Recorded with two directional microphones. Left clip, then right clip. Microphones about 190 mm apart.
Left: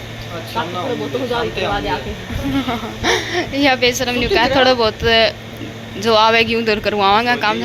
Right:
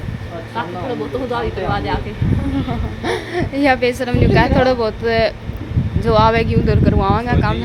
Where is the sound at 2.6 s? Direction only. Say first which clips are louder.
Left 4 dB; 10° right (ahead or behind).